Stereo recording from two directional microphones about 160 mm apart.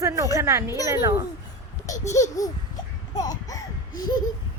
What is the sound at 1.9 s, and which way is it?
Babbling, 20° left (ahead or behind).